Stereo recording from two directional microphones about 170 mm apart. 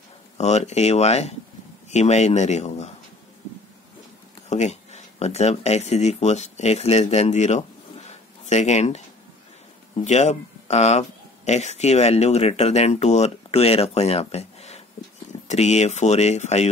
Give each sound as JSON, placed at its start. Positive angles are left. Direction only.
{"t": 0.4, "sound": "speech", "side_deg": 40}
{"t": 4.5, "sound": "speech", "side_deg": 40}